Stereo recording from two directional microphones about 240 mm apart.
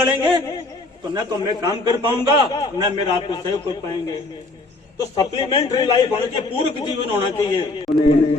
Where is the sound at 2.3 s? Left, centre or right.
Centre.